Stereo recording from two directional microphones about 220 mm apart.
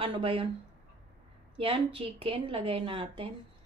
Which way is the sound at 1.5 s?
25° right (ahead or behind).